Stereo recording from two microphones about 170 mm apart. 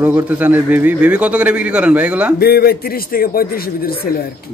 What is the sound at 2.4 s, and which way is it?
A man's voice, 65° left (ahead or behind).